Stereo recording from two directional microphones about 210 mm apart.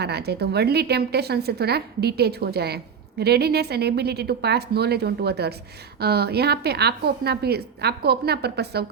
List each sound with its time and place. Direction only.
0.0 s a woman's voice: 50° right (ahead or behind)